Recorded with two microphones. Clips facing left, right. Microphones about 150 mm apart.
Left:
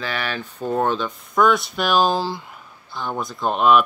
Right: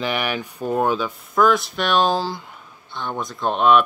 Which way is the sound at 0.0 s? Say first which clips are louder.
Right 3 dB; 15° right (ahead or behind).